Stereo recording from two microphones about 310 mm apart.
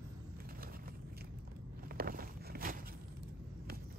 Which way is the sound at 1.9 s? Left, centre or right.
Right.